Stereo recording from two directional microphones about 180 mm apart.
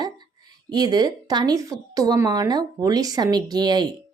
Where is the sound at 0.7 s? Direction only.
20° right (ahead or behind).